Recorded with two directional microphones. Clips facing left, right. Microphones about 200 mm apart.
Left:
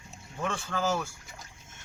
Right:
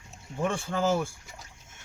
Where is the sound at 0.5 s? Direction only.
25° right (ahead or behind).